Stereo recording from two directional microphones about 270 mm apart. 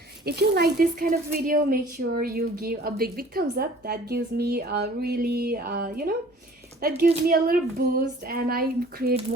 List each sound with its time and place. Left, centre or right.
0.3 s speech: right